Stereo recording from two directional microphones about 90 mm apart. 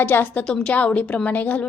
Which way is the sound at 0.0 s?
25° left (ahead or behind).